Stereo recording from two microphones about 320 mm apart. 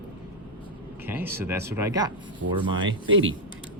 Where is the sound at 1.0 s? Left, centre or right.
Centre.